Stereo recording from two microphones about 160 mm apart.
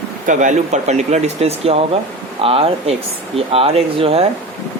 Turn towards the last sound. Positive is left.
turn(degrees=-40)  # may be behind; listen again after turning